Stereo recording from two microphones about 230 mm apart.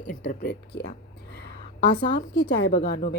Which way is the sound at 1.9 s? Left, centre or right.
Left.